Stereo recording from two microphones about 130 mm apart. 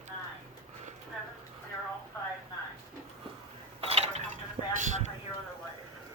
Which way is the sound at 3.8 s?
50° right (ahead or behind).